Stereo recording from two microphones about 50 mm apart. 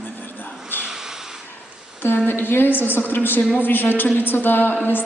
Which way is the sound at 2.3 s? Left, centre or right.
Left.